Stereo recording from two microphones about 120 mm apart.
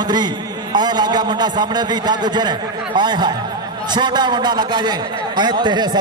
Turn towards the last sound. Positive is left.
turn(degrees=-35)  # may be behind; listen again after turning